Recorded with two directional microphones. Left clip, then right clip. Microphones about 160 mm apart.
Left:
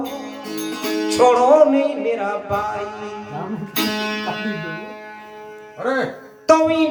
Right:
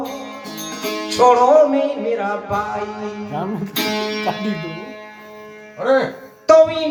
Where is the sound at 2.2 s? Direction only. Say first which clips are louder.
Right 1 dB; 40° left (ahead or behind).